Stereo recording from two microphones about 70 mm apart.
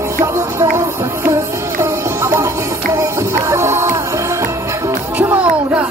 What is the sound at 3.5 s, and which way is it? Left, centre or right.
Music, right.